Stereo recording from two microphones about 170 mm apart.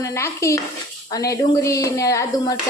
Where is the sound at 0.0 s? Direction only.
15° left (ahead or behind).